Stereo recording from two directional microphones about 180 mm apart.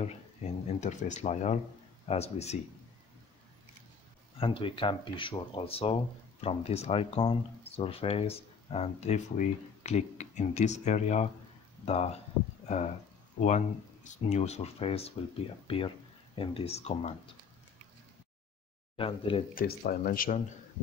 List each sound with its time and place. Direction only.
0.7 s speech: 40° left (ahead or behind)
4.4 s speech: 30° left (ahead or behind)
18.9 s speech: 30° left (ahead or behind)
19.5 s speech: 55° left (ahead or behind)